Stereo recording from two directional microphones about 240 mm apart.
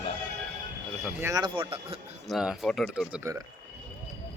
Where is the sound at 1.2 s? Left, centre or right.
Centre.